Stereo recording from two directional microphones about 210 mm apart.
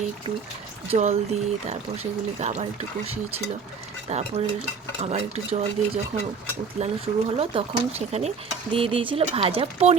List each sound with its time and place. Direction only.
0.9 s speech: 30° right (ahead or behind)
4.1 s speech: 30° right (ahead or behind)